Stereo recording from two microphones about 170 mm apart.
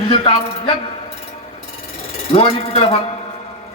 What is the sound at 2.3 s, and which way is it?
Speech, 35° left (ahead or behind).